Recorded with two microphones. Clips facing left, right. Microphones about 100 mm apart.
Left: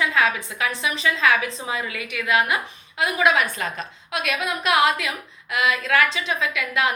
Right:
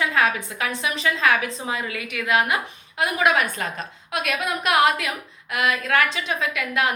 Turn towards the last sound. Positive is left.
turn(degrees=-45)  # may be behind; listen again after turning